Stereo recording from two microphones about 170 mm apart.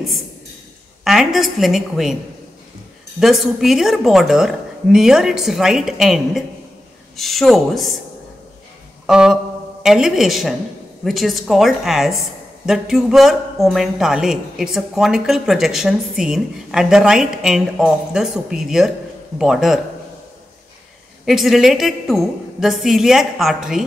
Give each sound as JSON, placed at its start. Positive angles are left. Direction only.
{"t": 1.0, "sound": "speech", "side_deg": 0}
{"t": 3.2, "sound": "speech", "side_deg": 0}
{"t": 9.0, "sound": "a sound", "side_deg": -5}
{"t": 9.8, "sound": "speech", "side_deg": -5}
{"t": 21.3, "sound": "speech", "side_deg": 0}